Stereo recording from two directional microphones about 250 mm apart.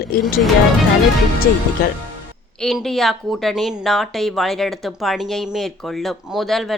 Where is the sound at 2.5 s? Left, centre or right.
Centre.